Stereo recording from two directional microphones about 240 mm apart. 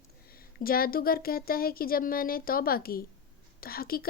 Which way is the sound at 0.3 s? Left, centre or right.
Left.